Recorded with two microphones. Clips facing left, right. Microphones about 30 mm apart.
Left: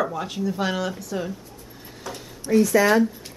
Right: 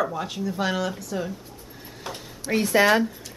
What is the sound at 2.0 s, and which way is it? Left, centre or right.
Speech, right.